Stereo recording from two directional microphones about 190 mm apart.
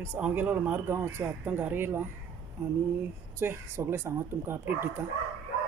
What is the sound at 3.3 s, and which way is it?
A man's voice, 15° right (ahead or behind).